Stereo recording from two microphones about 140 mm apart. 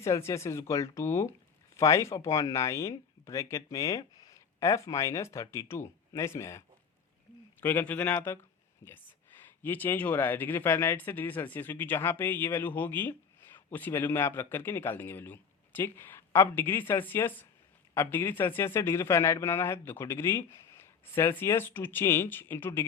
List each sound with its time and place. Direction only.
0.0 s speech: 20° left (ahead or behind)